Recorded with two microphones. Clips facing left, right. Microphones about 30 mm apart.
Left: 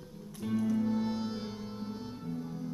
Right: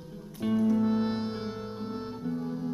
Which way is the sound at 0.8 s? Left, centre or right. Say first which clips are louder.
Right 4 dB; right.